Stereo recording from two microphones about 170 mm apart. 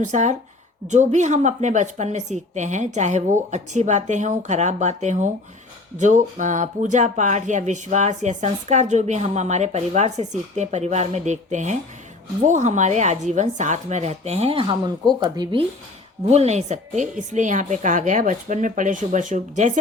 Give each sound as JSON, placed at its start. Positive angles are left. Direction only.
{"t": 0.0, "sound": "speech", "side_deg": -45}
{"t": 16.2, "sound": "speech", "side_deg": -40}